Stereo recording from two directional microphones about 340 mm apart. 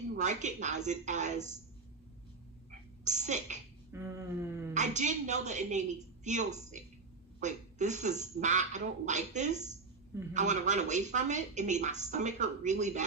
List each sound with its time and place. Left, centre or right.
0.2 s speech: right
3.0 s speech: right
3.9 s a sound: centre
4.7 s speech: right